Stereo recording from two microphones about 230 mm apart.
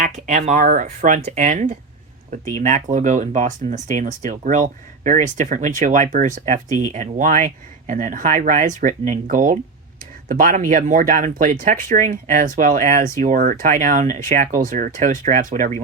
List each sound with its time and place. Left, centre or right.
0.0 s speech: right